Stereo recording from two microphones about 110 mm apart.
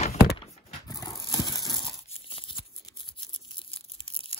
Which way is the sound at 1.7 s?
50° left (ahead or behind).